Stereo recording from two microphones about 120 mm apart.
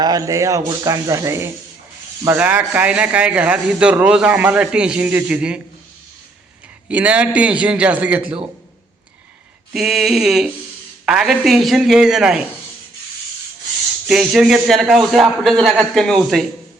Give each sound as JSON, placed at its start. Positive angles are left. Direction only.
{"t": 0.0, "sound": "speech", "side_deg": -30}
{"t": 6.8, "sound": "speech", "side_deg": -10}
{"t": 9.7, "sound": "a man's voice", "side_deg": -5}
{"t": 14.1, "sound": "a man's voice", "side_deg": -5}